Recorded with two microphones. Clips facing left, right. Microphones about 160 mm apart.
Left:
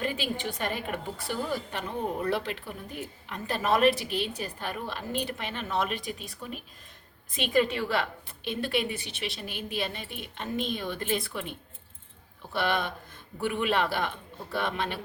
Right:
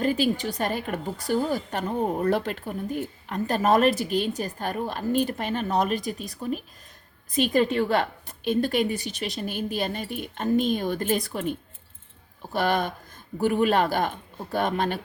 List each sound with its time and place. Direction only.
0.0 s a woman's voice: 40° right (ahead or behind)
12.5 s a woman's voice: 40° right (ahead or behind)